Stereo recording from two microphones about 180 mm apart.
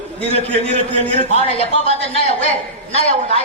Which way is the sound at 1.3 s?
35° left (ahead or behind).